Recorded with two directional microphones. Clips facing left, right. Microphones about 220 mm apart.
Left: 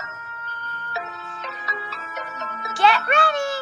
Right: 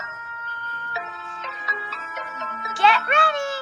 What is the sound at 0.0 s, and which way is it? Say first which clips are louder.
Music: even; 40° left (ahead or behind).